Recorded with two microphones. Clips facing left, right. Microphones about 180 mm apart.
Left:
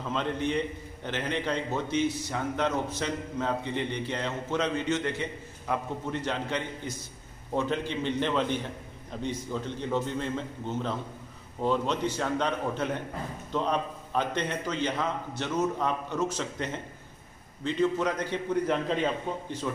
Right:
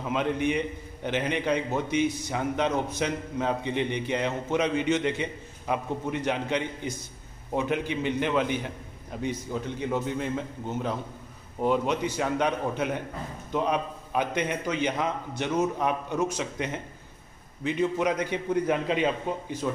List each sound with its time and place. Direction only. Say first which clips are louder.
0.0 s a man's voice: right 3 dB; 15° right (ahead or behind)